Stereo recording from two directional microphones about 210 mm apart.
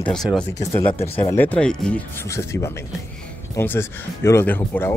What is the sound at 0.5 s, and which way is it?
Speech, 30° left (ahead or behind).